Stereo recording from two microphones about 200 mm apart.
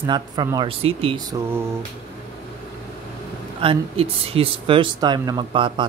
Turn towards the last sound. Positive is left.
turn(degrees=-25)  # may be behind; listen again after turning